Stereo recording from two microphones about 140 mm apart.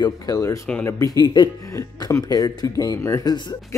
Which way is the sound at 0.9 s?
25° left (ahead or behind).